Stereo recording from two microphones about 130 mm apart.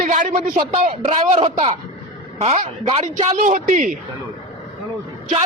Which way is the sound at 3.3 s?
80° right.